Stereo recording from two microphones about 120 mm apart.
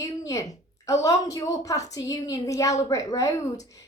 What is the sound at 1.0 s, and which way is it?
A woman's voice, 30° left (ahead or behind).